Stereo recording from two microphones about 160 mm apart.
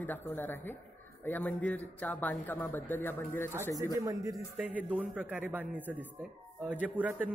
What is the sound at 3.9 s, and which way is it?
Speech, 20° right (ahead or behind).